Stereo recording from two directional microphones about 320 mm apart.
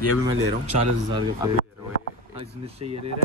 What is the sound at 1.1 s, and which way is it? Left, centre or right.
Speech, centre.